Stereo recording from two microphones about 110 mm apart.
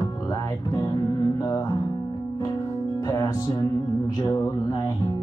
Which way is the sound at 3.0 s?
30° left (ahead or behind).